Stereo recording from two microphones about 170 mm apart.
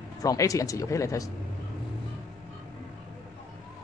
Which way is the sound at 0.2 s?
20° left (ahead or behind).